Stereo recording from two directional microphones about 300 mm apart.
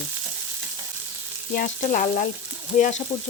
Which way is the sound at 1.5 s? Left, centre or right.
Left.